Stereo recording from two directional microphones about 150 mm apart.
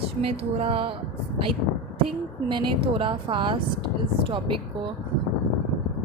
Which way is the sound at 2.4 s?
30° right (ahead or behind).